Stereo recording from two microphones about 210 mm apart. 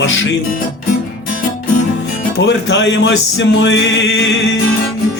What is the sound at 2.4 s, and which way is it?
Music, 55° left (ahead or behind).